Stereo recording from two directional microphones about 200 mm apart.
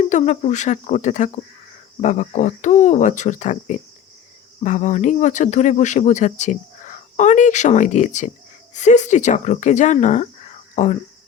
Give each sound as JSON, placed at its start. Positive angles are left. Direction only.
{"t": 0.0, "sound": "speech", "side_deg": 35}